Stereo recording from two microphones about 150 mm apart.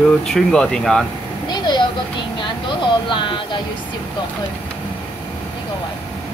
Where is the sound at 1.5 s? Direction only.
30° left (ahead or behind).